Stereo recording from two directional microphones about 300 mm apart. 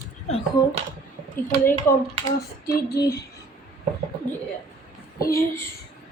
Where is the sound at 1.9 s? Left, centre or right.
Centre.